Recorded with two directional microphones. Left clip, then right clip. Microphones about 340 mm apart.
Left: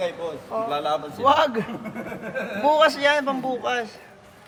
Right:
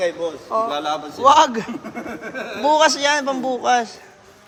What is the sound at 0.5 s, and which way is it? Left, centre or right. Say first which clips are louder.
A man's voice: right 3 dB; centre.